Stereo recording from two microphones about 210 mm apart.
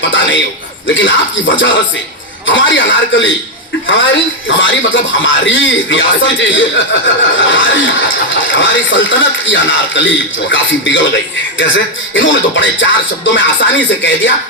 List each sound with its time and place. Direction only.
0.1 s a man's voice: 65° left (ahead or behind)
12.1 s speech: 65° left (ahead or behind)